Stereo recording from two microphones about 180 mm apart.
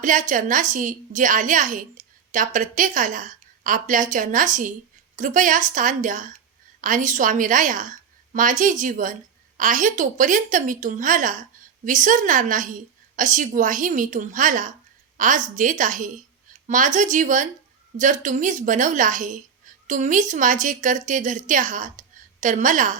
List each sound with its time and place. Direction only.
0.0 s a woman's voice: 45° right (ahead or behind)